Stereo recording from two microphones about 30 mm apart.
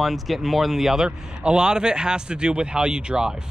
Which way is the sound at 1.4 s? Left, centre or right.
Right.